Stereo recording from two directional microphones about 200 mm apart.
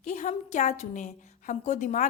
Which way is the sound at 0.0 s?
35° left (ahead or behind).